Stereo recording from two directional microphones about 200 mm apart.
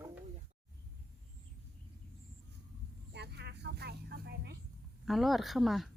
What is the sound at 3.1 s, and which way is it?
Vehicle, 55° right (ahead or behind).